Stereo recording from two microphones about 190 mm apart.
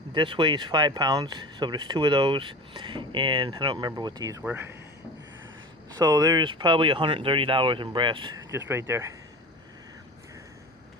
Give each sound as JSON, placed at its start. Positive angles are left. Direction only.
{"t": 0.1, "sound": "speech", "side_deg": -25}
{"t": 6.0, "sound": "speech", "side_deg": -20}